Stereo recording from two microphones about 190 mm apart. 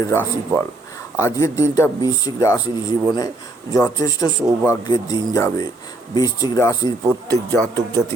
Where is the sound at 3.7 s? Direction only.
20° left (ahead or behind).